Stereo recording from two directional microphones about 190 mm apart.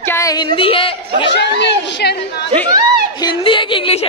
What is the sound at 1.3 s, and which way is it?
Speech, 65° left (ahead or behind).